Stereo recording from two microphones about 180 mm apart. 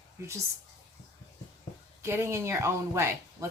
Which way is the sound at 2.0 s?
15° right (ahead or behind).